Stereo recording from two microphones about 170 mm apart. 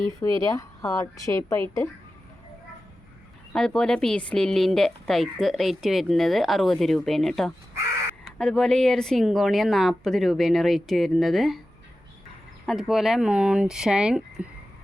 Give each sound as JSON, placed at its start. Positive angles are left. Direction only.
{"t": 0.2, "sound": "a woman's voice", "side_deg": 20}
{"t": 3.5, "sound": "a woman's voice", "side_deg": 5}
{"t": 12.6, "sound": "a woman's voice", "side_deg": 0}